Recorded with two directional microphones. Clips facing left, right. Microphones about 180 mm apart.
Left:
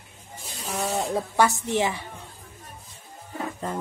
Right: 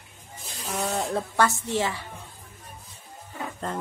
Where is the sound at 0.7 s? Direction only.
Centre (ahead or behind).